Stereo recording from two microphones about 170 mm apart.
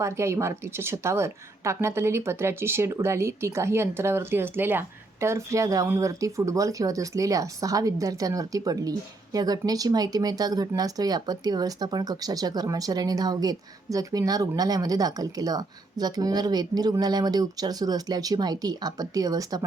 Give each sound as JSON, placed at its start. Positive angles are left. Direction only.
{"t": 0.0, "sound": "speech", "side_deg": -15}